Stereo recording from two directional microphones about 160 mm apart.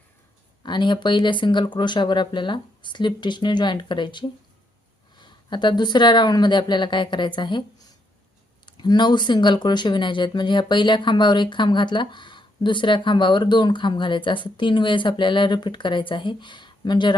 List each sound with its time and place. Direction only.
0.6 s speech: 30° left (ahead or behind)
8.6 s speech: 30° left (ahead or behind)